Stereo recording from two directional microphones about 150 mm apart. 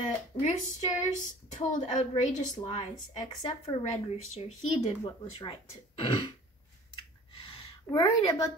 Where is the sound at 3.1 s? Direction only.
35° left (ahead or behind).